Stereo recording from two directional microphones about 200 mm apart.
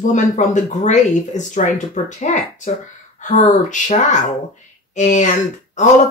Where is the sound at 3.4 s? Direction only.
40° left (ahead or behind).